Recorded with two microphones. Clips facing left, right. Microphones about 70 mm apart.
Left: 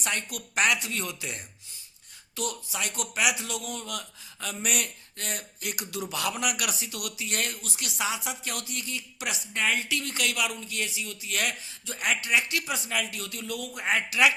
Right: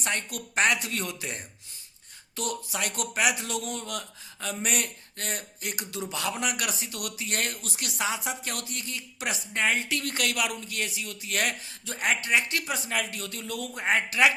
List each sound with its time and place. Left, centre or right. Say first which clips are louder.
0.0 s speech: right 1 dB; right
10.0 s a man's voice: right 1 dB; right